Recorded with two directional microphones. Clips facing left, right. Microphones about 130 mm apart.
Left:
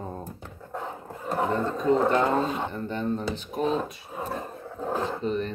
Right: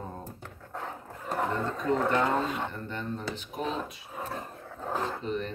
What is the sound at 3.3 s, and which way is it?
Speech, 35° left (ahead or behind).